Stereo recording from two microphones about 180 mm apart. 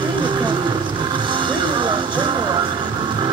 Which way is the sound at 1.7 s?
25° right (ahead or behind).